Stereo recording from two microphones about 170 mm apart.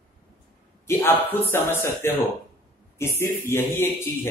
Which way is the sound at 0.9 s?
10° left (ahead or behind).